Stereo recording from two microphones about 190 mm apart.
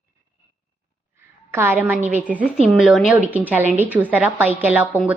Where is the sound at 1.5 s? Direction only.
10° right (ahead or behind).